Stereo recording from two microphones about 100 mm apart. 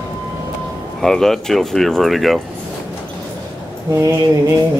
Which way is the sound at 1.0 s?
5° left (ahead or behind).